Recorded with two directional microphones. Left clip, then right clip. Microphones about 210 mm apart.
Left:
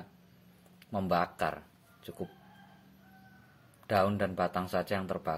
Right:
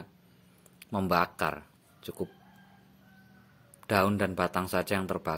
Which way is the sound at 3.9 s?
30° right (ahead or behind).